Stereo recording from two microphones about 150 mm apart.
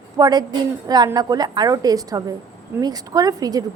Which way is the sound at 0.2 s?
25° right (ahead or behind).